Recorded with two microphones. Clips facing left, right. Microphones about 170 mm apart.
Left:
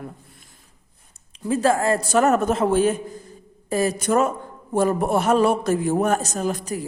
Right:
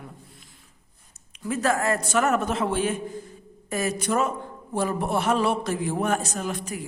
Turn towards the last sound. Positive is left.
turn(degrees=40)  # may be behind; listen again after turning